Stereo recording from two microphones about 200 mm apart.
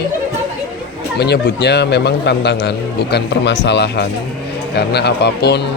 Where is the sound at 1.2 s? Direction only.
55° left (ahead or behind).